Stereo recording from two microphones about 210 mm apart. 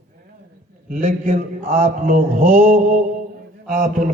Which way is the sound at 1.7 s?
30° right (ahead or behind).